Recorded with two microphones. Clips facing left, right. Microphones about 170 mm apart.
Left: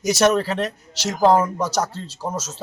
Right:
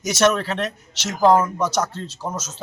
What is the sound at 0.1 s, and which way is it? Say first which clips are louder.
A man's voice: left 1 dB; 35° left (ahead or behind).